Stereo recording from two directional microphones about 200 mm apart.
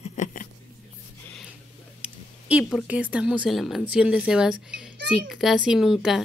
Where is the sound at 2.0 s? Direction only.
5° right (ahead or behind).